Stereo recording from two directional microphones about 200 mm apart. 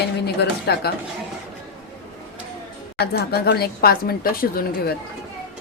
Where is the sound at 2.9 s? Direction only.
50° left (ahead or behind).